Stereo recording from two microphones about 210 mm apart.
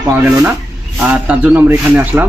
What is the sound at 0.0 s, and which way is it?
A man's voice, 10° right (ahead or behind).